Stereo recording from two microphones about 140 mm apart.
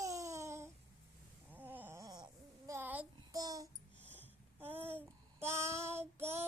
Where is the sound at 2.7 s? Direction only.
10° right (ahead or behind).